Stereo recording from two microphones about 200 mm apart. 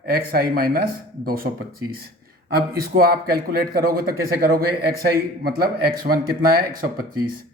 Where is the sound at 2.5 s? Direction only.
50° right (ahead or behind).